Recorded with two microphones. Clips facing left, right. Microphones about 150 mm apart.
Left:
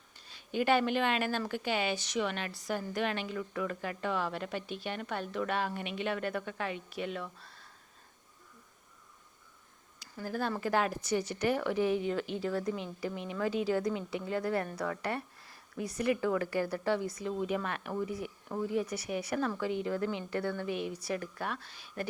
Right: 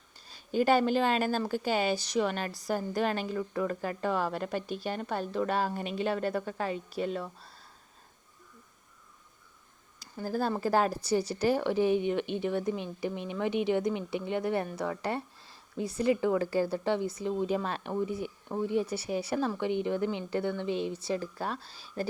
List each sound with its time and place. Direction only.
0.3 s a woman's voice: 40° right (ahead or behind)
10.2 s a woman's voice: 35° right (ahead or behind)